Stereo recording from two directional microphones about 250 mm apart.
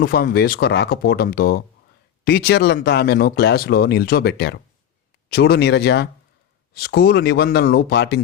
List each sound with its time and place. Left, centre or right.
0.0 s speech: left